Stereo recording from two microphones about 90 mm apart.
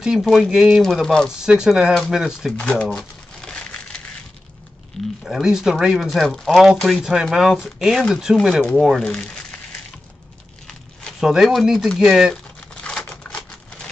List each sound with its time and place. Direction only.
0.0 s speech: 5° right (ahead or behind)
1.4 s speech: 5° right (ahead or behind)
2.5 s speech: 15° left (ahead or behind)
3.0 s crumpling: 5° left (ahead or behind)
5.2 s speech: 5° right (ahead or behind)
9.0 s speech: 10° left (ahead or behind)
11.1 s speech: 5° right (ahead or behind)
12.5 s crumpling: 10° left (ahead or behind)